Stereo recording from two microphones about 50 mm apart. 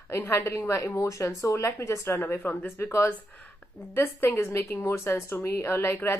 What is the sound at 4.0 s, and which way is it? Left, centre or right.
Speech, left.